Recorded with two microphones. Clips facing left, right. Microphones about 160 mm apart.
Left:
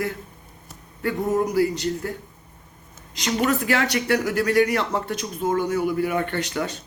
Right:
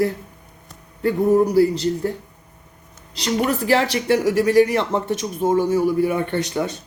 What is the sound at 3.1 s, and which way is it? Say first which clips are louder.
Speech: right 1 dB; 35° right (ahead or behind).